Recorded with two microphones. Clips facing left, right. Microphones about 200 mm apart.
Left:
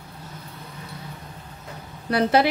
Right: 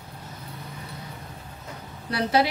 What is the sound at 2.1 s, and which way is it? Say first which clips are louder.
Speech: left 4 dB; 55° left (ahead or behind).